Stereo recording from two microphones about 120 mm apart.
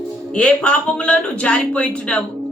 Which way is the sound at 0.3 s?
10° left (ahead or behind).